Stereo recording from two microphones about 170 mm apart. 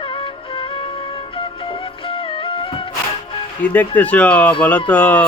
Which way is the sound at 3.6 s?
10° left (ahead or behind).